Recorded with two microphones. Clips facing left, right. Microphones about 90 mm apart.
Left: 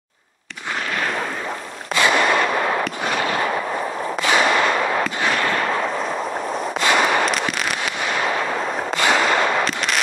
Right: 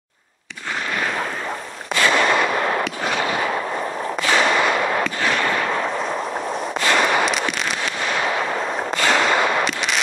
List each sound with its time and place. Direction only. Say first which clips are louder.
2.0 s gunshot: even; 10° left (ahead or behind)
4.3 s a sound: left 1 dB; 5° left (ahead or behind)
4.6 s fireworks: even; centre (ahead or behind)
6.8 s artillery fire: left 1 dB; 10° left (ahead or behind)
7.2 s fireworks: even; centre (ahead or behind)
9.0 s fireworks: even; 5° left (ahead or behind)